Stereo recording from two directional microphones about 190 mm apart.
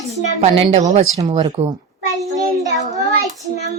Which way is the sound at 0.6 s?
35° right (ahead or behind).